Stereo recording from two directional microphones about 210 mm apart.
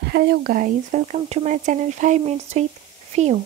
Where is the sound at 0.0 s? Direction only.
50° right (ahead or behind).